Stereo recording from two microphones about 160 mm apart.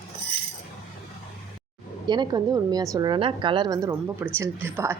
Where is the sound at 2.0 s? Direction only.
25° right (ahead or behind).